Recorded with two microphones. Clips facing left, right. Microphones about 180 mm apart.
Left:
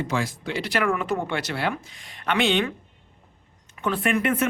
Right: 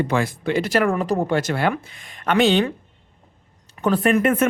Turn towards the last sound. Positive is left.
turn(degrees=-50)  # may be behind; listen again after turning